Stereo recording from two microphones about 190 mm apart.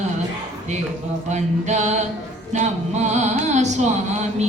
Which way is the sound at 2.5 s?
40° right (ahead or behind).